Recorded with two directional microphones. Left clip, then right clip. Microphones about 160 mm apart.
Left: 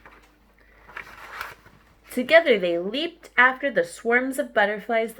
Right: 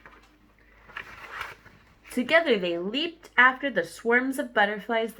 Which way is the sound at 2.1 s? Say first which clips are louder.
Left 5 dB; 25° left (ahead or behind).